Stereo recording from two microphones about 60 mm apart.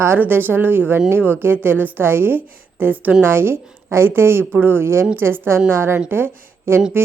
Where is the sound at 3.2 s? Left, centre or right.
Right.